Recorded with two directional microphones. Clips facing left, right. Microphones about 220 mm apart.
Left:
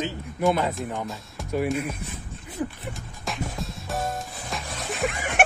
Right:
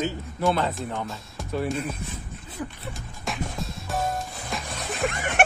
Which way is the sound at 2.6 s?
25° left (ahead or behind).